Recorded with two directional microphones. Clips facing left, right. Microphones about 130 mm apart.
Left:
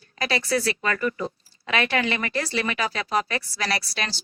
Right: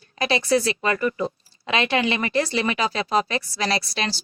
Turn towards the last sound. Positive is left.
turn(degrees=-25)  # may be behind; listen again after turning